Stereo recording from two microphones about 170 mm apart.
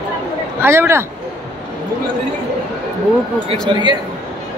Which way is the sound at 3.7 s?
25° right (ahead or behind).